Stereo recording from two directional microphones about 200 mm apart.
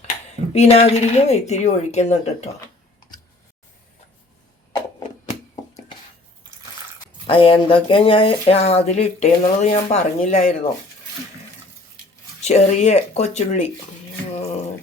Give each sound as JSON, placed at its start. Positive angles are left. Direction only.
{"t": 0.5, "sound": "speech", "side_deg": 30}
{"t": 7.3, "sound": "speech", "side_deg": 25}
{"t": 12.4, "sound": "speech", "side_deg": 35}